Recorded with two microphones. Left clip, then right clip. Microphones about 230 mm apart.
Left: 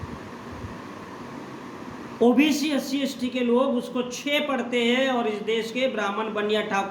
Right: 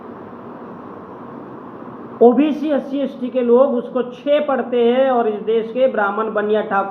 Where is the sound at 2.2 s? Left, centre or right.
Left.